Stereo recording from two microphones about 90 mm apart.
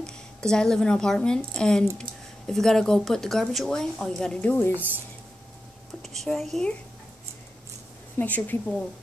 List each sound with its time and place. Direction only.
0.0 s speech: 10° left (ahead or behind)
4.7 s speech: 20° right (ahead or behind)
6.0 s speech: centre (ahead or behind)
8.2 s a woman's voice: 20° left (ahead or behind)